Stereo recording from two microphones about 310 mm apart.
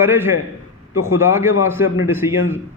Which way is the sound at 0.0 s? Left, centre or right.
Centre.